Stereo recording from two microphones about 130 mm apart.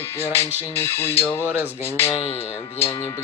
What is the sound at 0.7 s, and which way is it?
Speech, 15° left (ahead or behind).